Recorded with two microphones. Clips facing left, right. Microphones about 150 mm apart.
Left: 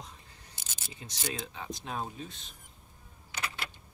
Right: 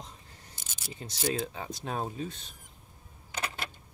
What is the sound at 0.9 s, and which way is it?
Speech, 40° right (ahead or behind).